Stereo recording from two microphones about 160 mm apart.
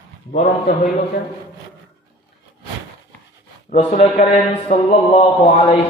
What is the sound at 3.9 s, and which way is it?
A man's voice, 40° left (ahead or behind).